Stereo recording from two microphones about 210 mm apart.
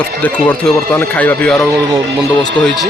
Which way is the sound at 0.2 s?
10° left (ahead or behind).